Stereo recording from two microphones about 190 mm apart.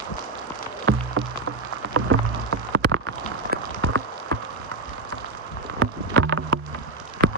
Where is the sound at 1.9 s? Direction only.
90° right.